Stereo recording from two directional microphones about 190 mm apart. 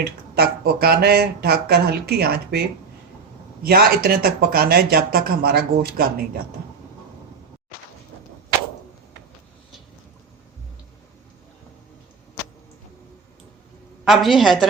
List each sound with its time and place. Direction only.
0.0 s speech: 55° right (ahead or behind)
14.0 s a woman's voice: centre (ahead or behind)